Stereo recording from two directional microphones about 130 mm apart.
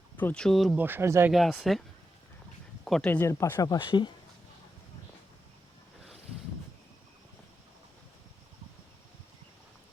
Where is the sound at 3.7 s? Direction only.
35° left (ahead or behind).